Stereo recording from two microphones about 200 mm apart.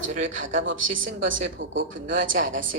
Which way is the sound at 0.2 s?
70° right (ahead or behind).